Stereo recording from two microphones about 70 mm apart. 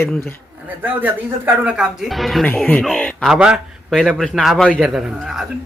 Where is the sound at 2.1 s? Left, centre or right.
Centre.